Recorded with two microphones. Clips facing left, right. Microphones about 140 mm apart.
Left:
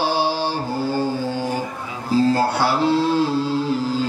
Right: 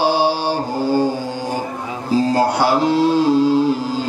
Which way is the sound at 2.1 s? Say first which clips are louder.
Right 1 dB; 15° right (ahead or behind).